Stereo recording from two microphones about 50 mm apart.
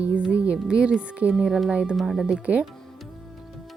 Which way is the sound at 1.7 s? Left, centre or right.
Right.